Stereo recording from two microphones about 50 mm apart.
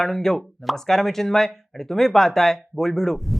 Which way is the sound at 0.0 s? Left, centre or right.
Centre.